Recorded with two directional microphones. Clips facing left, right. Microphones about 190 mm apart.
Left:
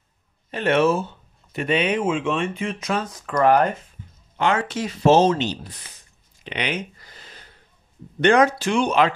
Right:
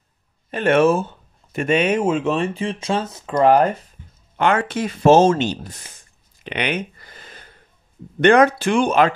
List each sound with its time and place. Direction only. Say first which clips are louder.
0.5 s speech: right 3 dB; 50° right (ahead or behind); by 3.7 s 30° right (ahead or behind)
4.4 s speech: right 3 dB; 55° right (ahead or behind)